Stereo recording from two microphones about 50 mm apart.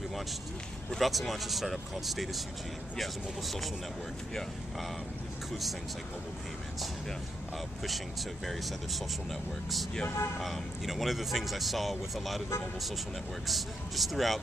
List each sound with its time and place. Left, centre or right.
0.8 s speech: centre
8.5 s speech: centre
10.0 s speech: left
10.4 s speech: centre
13.5 s speech: centre